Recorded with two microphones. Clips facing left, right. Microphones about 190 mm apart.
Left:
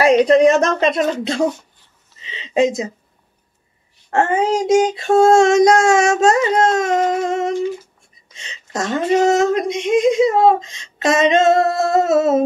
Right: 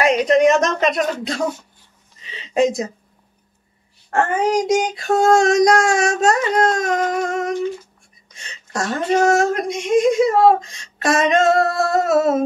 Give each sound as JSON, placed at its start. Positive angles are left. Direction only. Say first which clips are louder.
{"t": 0.2, "sound": "speech", "louder": "left 3 dB", "side_deg": 30}
{"t": 2.2, "sound": "speech", "louder": "left 1 dB", "side_deg": 20}
{"t": 4.1, "sound": "speech", "louder": "left 1 dB", "side_deg": 25}